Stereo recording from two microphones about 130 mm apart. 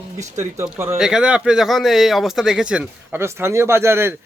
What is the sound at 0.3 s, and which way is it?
Speech, 20° right (ahead or behind).